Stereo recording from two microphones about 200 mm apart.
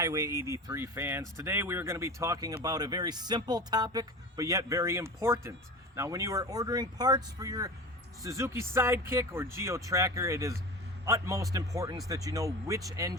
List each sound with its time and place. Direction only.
0.0 s speech: 15° right (ahead or behind)